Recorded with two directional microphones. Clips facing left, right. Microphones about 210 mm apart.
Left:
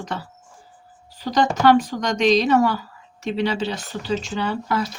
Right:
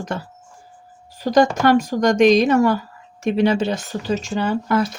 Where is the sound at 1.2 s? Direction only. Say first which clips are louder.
Right 4 dB; 50° right (ahead or behind).